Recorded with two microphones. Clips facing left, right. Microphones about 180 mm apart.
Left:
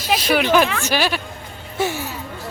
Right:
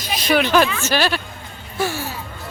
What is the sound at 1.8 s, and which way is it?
Speech, 25° left (ahead or behind).